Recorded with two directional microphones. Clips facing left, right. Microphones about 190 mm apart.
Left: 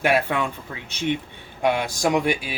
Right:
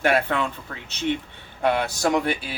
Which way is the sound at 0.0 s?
10° left (ahead or behind).